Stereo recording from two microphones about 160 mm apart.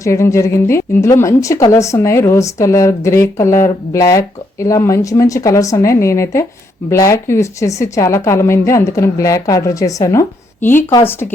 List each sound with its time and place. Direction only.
0.0 s speech: 20° left (ahead or behind)